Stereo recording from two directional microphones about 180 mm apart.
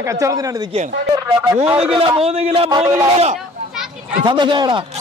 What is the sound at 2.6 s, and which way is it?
A man's voice, 25° right (ahead or behind).